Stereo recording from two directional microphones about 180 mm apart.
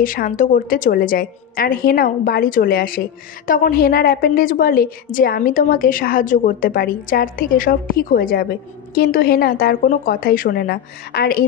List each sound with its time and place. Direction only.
0.0 s a woman's voice: 50° left (ahead or behind)